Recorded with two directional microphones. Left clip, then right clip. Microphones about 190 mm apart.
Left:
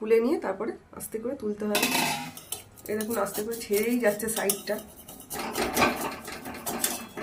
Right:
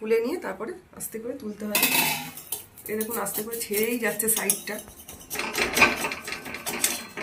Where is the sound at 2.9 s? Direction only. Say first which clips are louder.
Left 1 dB; 60° left (ahead or behind).